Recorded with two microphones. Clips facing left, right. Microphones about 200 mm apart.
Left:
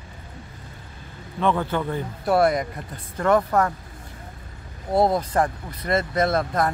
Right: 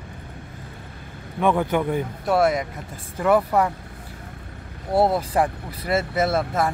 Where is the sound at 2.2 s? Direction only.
Centre (ahead or behind).